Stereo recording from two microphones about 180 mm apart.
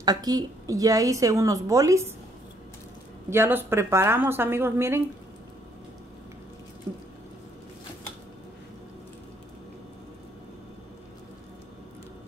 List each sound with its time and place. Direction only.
0.0 s a woman's voice: 20° right (ahead or behind)
3.3 s a woman's voice: 15° right (ahead or behind)